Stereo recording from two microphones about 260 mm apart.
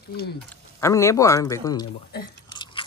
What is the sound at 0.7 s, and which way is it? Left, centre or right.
A man's voice, centre.